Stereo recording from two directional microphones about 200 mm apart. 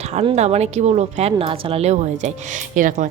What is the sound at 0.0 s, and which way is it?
Speech, 35° right (ahead or behind).